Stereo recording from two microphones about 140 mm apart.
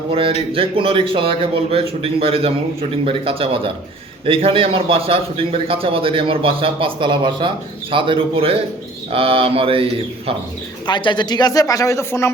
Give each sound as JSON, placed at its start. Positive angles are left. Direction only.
{"t": 0.1, "sound": "a man's voice", "side_deg": -40}
{"t": 10.8, "sound": "speech", "side_deg": 35}